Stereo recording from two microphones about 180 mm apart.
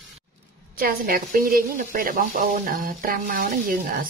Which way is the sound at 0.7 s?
55° right (ahead or behind).